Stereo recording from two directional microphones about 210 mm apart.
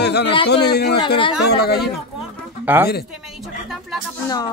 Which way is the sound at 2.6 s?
10° right (ahead or behind).